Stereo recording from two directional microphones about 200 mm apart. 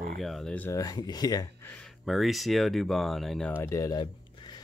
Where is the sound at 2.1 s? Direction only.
Centre (ahead or behind); by 4.0 s 15° left (ahead or behind).